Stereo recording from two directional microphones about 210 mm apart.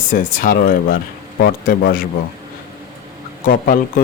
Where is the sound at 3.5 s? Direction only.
40° left (ahead or behind).